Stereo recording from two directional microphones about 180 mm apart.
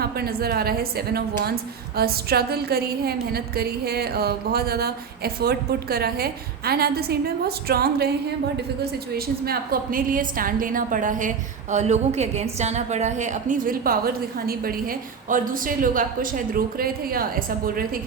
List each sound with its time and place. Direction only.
0.0 s a woman's voice: 60° right (ahead or behind)